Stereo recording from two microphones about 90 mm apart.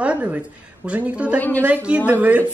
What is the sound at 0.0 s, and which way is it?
A woman's voice, 15° right (ahead or behind).